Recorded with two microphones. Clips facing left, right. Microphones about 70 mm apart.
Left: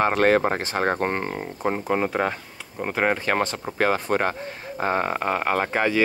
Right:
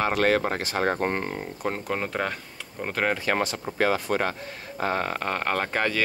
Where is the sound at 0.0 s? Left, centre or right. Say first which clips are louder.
Left 4 dB; left.